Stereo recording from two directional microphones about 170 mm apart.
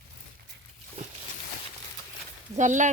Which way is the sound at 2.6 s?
45° right (ahead or behind).